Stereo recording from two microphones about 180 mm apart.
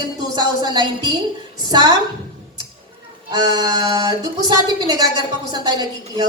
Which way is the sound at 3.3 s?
25° right (ahead or behind).